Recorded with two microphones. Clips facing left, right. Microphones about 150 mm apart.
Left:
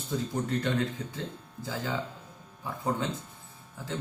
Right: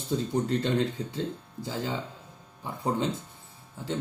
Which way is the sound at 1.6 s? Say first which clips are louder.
Right 1 dB; 25° right (ahead or behind).